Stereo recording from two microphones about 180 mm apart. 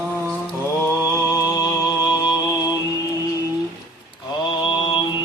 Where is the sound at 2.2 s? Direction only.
20° left (ahead or behind).